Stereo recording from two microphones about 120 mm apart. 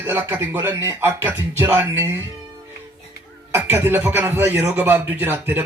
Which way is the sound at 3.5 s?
20° right (ahead or behind).